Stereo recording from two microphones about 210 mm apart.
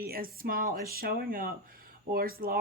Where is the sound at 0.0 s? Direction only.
45° right (ahead or behind).